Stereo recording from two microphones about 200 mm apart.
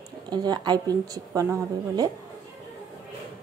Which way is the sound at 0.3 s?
20° right (ahead or behind).